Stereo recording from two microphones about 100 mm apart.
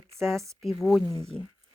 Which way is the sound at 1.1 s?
90° right.